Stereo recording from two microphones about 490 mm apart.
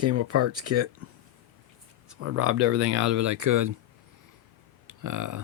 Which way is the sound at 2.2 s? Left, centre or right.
Right.